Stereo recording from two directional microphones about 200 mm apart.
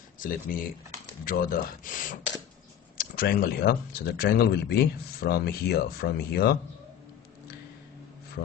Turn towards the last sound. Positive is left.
turn(degrees=55)  # may be behind; listen again after turning